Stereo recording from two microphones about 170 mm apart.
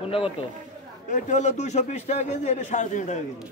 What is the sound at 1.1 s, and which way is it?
A man's voice, 45° left (ahead or behind).